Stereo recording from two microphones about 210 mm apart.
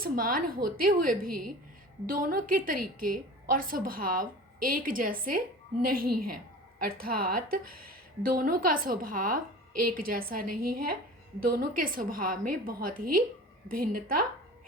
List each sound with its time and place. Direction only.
0.0 s a woman's voice: 45° right (ahead or behind)